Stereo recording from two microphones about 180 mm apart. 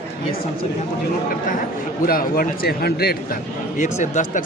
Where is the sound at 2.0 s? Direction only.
55° left (ahead or behind).